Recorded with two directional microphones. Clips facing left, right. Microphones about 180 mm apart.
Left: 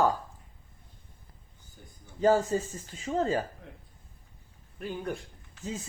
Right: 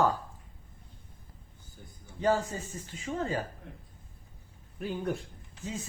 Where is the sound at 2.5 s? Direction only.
40° left (ahead or behind).